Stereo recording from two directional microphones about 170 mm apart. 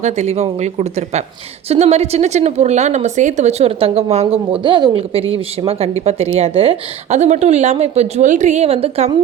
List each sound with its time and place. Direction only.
0.0 s a woman's voice: 40° right (ahead or behind)